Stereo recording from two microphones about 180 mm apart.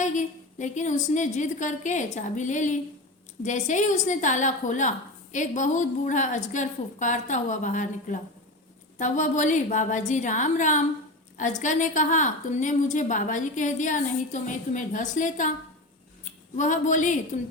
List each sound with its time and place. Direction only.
0.0 s a woman's voice: 45° left (ahead or behind)
16.6 s a woman's voice: 45° left (ahead or behind)